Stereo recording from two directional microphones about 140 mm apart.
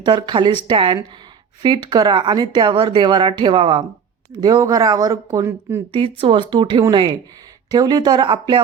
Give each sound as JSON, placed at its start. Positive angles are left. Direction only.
{"t": 0.0, "sound": "speech", "side_deg": -30}
{"t": 4.4, "sound": "speech", "side_deg": -25}
{"t": 5.9, "sound": "speech", "side_deg": -40}